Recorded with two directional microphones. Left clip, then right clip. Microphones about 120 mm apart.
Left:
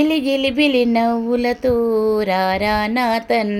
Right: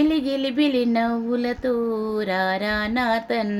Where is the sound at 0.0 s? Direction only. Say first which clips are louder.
Left 5 dB; 25° left (ahead or behind).